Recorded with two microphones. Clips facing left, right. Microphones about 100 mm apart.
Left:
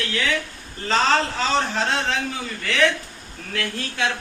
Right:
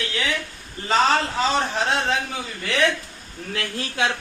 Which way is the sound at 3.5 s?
20° right (ahead or behind).